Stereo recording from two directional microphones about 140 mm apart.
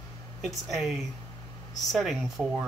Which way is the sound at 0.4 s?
Centre (ahead or behind).